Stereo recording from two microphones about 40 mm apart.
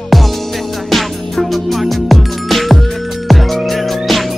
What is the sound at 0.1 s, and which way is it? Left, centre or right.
Music, centre.